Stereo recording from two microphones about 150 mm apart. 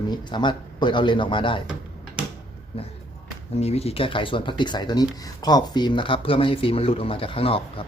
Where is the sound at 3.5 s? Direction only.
45° left (ahead or behind).